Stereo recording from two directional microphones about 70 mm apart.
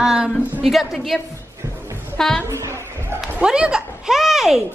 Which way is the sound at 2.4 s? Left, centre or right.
Right.